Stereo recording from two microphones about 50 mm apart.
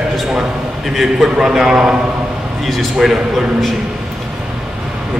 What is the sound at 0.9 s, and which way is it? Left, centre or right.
A man's voice, centre.